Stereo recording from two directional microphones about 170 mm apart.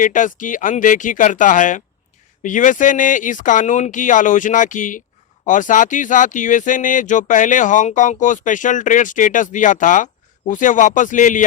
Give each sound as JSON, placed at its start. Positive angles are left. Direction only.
{"t": 0.0, "sound": "speech", "side_deg": 50}